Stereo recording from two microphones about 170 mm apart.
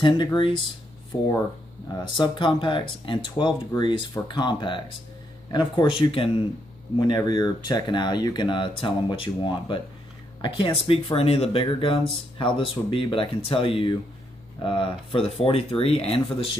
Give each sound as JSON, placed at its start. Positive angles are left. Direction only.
{"t": 0.0, "sound": "speech", "side_deg": 30}